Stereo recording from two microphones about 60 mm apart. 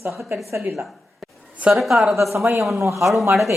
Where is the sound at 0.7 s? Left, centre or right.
Centre.